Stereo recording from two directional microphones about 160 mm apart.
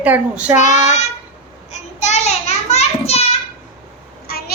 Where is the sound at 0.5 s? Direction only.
50° left (ahead or behind).